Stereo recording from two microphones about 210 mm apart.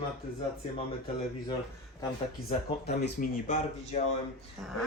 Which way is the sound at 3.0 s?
45° left (ahead or behind).